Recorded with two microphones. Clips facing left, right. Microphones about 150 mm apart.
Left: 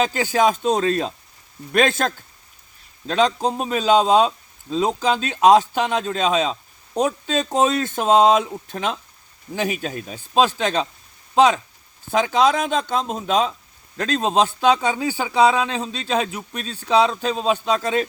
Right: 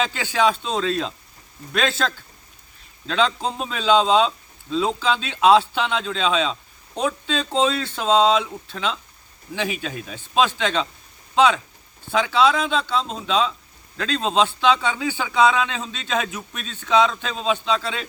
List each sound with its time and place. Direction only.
0.0 s a man's voice: 40° left (ahead or behind)